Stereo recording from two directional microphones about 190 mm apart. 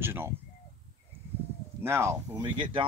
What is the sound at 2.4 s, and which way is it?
Speech, 25° right (ahead or behind).